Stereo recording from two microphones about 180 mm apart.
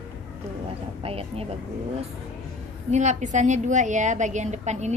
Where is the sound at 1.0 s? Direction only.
35° right (ahead or behind).